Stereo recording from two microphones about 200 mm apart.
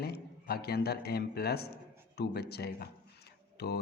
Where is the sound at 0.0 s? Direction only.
50° left (ahead or behind).